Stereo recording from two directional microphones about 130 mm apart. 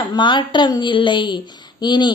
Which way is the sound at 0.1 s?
35° left (ahead or behind).